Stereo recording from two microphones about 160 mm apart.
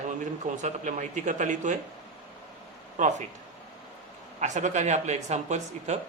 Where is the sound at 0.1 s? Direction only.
50° right (ahead or behind).